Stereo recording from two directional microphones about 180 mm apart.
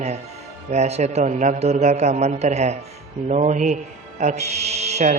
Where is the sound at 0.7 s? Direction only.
40° right (ahead or behind).